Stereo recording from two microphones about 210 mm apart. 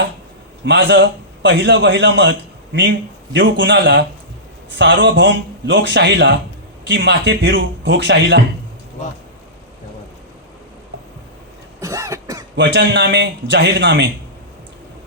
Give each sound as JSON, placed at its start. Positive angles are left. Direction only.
{"t": 0.6, "sound": "a man's voice", "side_deg": -55}
{"t": 3.3, "sound": "a man's voice", "side_deg": -55}
{"t": 11.8, "sound": "cough", "side_deg": -15}
{"t": 12.5, "sound": "a man's voice", "side_deg": -55}